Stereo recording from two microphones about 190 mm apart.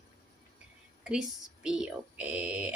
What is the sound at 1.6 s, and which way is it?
Speech, 5° right (ahead or behind).